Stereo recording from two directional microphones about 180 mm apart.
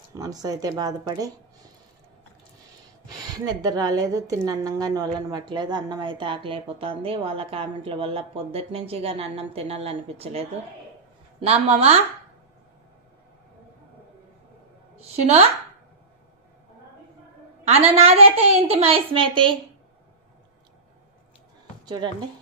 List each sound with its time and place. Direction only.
0.1 s a woman's voice: 20° right (ahead or behind)
3.1 s a woman's voice: 20° right (ahead or behind)
11.4 s a woman's voice: 35° right (ahead or behind)
17.6 s a woman's voice: 35° right (ahead or behind)
21.8 s speech: 25° right (ahead or behind)